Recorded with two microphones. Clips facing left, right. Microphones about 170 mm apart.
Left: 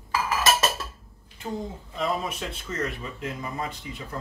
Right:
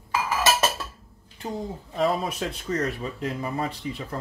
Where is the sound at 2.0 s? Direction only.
35° right (ahead or behind).